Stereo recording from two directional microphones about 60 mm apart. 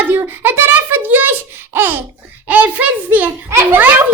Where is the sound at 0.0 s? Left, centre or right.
Right.